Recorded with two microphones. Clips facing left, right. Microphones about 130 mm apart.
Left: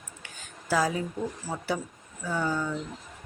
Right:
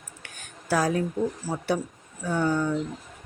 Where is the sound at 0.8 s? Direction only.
10° left (ahead or behind).